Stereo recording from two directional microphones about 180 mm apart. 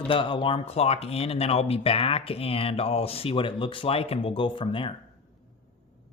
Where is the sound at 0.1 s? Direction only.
30° left (ahead or behind).